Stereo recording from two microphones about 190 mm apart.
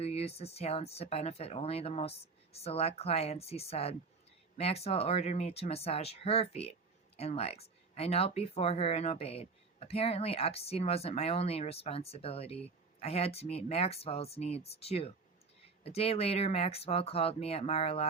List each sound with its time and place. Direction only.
0.0 s speech: 30° left (ahead or behind)